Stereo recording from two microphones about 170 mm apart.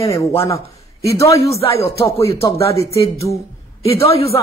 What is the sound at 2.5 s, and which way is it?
Speech, 65° right (ahead or behind).